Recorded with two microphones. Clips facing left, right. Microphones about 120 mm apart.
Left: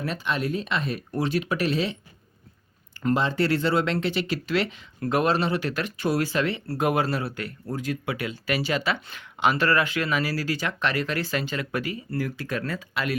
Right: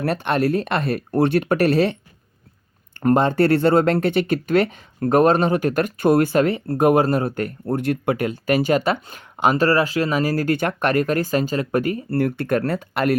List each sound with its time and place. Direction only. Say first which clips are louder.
0.0 s speech: right 8 dB; 60° right (ahead or behind)
3.0 s speech: right 7 dB; 50° right (ahead or behind)